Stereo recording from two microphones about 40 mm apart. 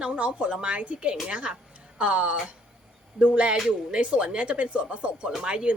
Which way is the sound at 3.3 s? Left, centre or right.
Right.